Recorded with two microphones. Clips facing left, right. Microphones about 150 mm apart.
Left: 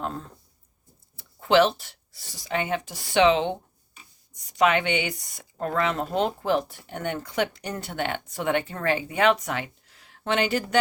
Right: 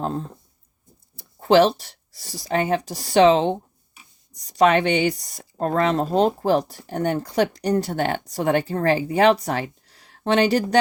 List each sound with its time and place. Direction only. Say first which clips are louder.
0.0 s speech: right 6 dB; 30° right (ahead or behind)